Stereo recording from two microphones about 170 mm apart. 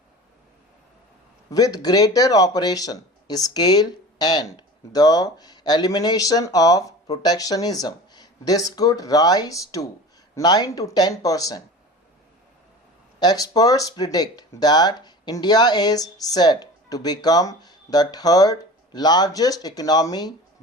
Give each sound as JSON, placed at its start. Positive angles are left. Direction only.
{"t": 1.5, "sound": "speech", "side_deg": 20}
{"t": 13.1, "sound": "speech", "side_deg": 20}